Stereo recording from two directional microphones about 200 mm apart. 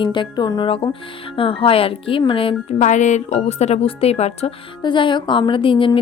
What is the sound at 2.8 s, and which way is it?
Speech, 35° left (ahead or behind).